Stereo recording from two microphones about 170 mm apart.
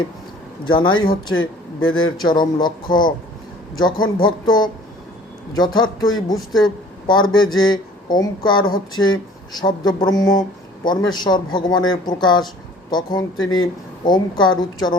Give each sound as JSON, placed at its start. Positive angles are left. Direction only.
{"t": 0.6, "sound": "speech", "side_deg": 30}